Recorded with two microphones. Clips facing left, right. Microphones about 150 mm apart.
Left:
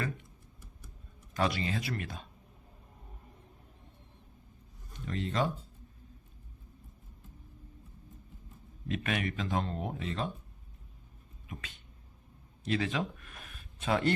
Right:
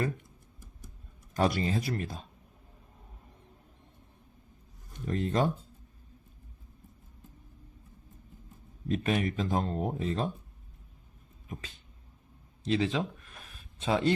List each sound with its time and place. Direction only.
1.3 s speech: 45° right (ahead or behind)
5.0 s speech: 45° right (ahead or behind)
8.9 s speech: 35° right (ahead or behind)
12.6 s speech: 25° right (ahead or behind)